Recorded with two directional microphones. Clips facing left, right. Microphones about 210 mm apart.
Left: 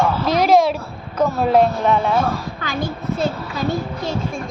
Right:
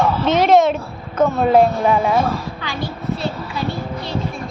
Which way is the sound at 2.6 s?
45° left (ahead or behind).